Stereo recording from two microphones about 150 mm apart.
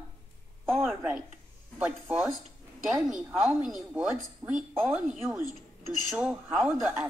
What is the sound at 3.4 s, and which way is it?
A woman's voice, centre (ahead or behind).